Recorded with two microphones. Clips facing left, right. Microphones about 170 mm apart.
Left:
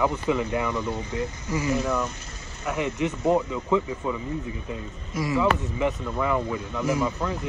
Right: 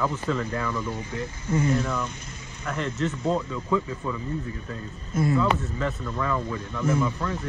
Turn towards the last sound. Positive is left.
turn(degrees=15)  # may be behind; listen again after turning